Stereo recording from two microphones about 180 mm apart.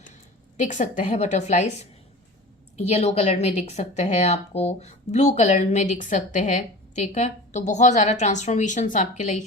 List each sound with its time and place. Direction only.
0.5 s a woman's voice: 45° left (ahead or behind)